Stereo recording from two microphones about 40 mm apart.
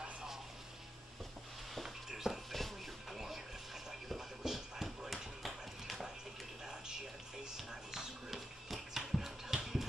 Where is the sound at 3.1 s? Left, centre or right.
Centre.